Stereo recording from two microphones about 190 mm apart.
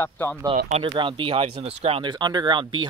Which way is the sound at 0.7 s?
30° right (ahead or behind).